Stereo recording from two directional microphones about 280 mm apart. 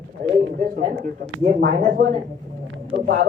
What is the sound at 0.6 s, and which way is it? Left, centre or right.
Speech, right.